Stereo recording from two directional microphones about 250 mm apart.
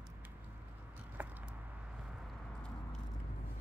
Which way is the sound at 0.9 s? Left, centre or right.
Centre.